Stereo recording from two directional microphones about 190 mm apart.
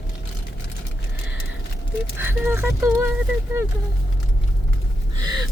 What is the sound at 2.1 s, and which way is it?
Speech, 10° right (ahead or behind).